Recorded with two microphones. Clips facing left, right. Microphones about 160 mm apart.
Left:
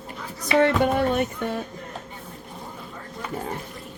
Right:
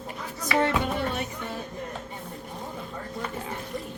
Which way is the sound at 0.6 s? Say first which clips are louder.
Left 6 dB; 60° left (ahead or behind).